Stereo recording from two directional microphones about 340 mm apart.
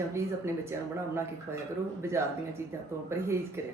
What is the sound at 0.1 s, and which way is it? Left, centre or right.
Speech, centre.